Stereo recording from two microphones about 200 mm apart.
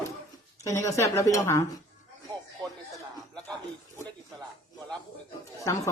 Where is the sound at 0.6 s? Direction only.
15° left (ahead or behind).